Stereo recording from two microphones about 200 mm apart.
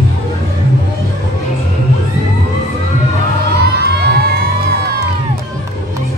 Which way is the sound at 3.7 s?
55° right (ahead or behind).